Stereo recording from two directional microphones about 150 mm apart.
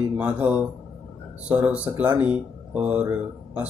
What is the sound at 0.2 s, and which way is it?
Speech, 10° right (ahead or behind).